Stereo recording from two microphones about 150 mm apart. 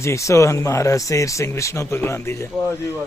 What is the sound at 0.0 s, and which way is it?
Speech, 20° left (ahead or behind).